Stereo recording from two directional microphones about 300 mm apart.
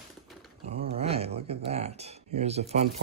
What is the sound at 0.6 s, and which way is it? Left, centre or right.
Speech, right.